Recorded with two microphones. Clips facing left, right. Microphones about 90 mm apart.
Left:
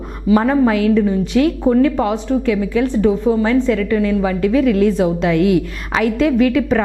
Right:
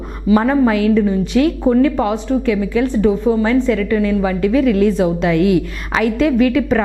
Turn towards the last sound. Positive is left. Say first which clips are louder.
# even
turn(degrees=-15)  # may be behind; listen again after turning